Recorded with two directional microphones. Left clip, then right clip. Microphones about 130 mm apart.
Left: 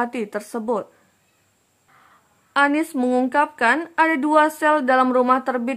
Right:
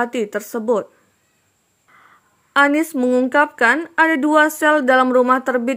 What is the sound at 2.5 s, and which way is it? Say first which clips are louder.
Speech: right 4 dB; 25° right (ahead or behind).